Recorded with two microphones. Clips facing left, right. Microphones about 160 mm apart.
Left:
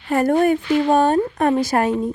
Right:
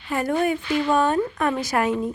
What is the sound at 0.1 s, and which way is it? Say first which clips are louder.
Speech: left 6 dB; 45° left (ahead or behind).